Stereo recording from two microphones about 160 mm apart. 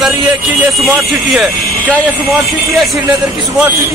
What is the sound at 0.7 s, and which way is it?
A man's voice, centre (ahead or behind).